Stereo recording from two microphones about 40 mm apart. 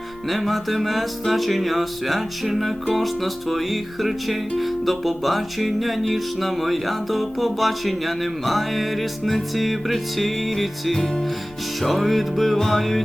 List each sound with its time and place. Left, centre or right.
0.3 s music: centre